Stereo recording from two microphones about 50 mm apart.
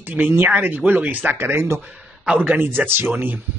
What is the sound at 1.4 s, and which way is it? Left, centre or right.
Speech, right.